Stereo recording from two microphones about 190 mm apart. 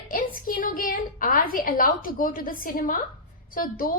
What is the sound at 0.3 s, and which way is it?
A woman's voice, 45° left (ahead or behind).